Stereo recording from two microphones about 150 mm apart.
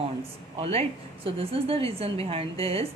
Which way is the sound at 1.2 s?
40° right (ahead or behind).